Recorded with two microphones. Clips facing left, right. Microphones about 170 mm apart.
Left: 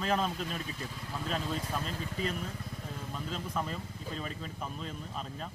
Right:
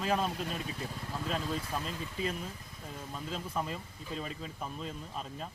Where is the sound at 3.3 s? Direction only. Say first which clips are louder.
Even; 5° right (ahead or behind).